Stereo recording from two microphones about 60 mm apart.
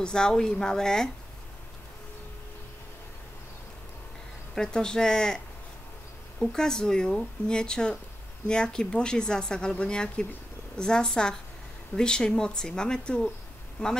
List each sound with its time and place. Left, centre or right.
0.0 s a woman's voice: centre
4.6 s a woman's voice: centre
6.4 s a woman's voice: centre